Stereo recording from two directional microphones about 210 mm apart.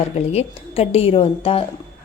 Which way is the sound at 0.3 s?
30° left (ahead or behind).